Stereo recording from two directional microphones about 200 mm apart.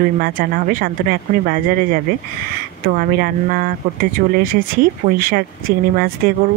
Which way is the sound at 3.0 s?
45° right (ahead or behind).